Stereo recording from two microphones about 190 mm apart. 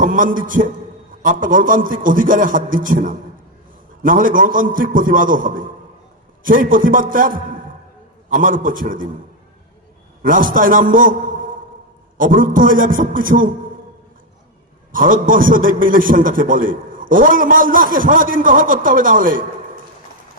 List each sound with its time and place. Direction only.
0.0 s a man's voice: 45° right (ahead or behind)
10.2 s a man's voice: 45° right (ahead or behind)
12.1 s a man's voice: 45° right (ahead or behind)
14.9 s a man's voice: 45° right (ahead or behind)